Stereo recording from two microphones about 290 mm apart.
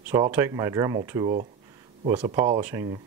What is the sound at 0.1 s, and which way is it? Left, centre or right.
Speech, centre.